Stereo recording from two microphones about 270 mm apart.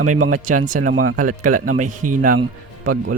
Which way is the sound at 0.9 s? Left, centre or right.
Right.